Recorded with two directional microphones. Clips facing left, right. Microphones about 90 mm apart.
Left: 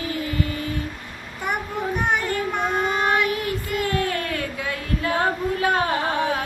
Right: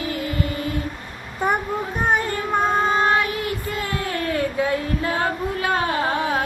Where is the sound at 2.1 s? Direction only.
40° right (ahead or behind).